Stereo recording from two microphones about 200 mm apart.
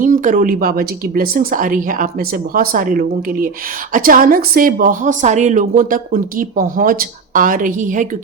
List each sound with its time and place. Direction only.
0.0 s a woman's voice: 40° right (ahead or behind)